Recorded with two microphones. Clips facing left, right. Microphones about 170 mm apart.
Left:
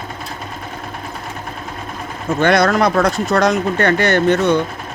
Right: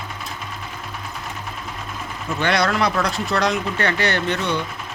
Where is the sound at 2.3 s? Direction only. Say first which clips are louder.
Left 7 dB; 50° left (ahead or behind).